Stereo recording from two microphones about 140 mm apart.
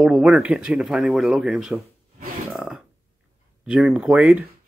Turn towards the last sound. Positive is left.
turn(degrees=-5)  # may be behind; listen again after turning